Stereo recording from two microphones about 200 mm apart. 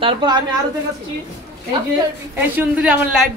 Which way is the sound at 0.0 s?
25° right (ahead or behind).